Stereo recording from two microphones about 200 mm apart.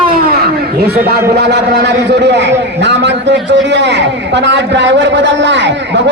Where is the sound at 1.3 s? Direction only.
55° right (ahead or behind).